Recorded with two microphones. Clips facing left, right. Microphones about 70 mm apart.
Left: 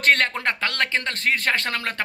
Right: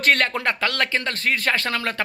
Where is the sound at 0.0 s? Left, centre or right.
Left.